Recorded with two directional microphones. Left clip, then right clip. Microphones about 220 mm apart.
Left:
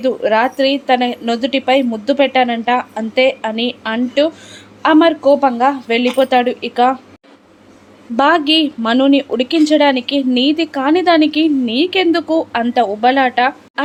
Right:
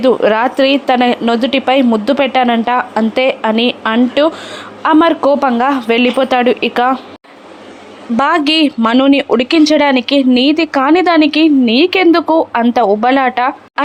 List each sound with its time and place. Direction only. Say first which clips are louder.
0.0 s speech: right 3 dB; 20° right (ahead or behind)
8.1 s speech: even; 10° right (ahead or behind)